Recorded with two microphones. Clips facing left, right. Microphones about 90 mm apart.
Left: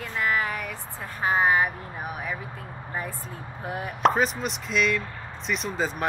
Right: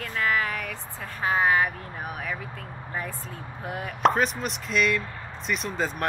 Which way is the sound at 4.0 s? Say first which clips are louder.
Even; centre (ahead or behind).